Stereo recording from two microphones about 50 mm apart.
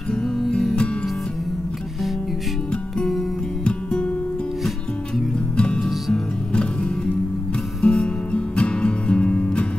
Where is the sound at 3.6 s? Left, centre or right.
Left.